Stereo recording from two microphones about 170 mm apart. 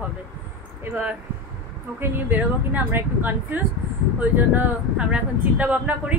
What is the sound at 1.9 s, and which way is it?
Speech, 10° right (ahead or behind).